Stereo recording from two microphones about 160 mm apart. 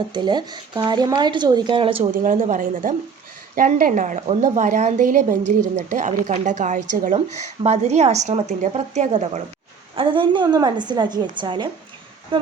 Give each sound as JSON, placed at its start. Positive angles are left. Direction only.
{"t": 0.1, "sound": "speech", "side_deg": -25}
{"t": 2.1, "sound": "a woman's voice", "side_deg": -55}
{"t": 9.9, "sound": "speech", "side_deg": -30}